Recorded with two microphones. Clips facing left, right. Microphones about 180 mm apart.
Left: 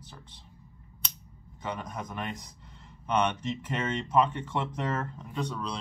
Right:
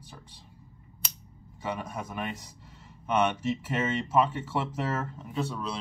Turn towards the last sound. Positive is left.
turn(degrees=-5)  # may be behind; listen again after turning